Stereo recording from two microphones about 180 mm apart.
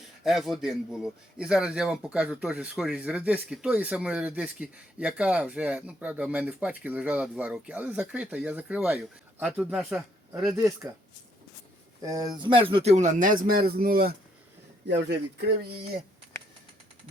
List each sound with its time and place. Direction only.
0.3 s speech: centre (ahead or behind)
12.0 s speech: 20° right (ahead or behind); by 14.2 s 55° right (ahead or behind)
14.8 s speech: 70° right (ahead or behind)